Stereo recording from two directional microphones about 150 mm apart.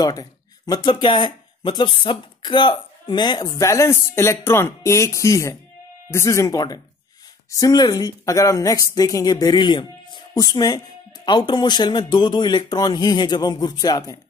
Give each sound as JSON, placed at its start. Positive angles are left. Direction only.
{"t": 0.0, "sound": "speech", "side_deg": 25}